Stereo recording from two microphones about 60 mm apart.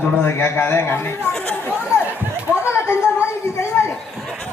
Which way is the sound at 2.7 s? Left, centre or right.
Left.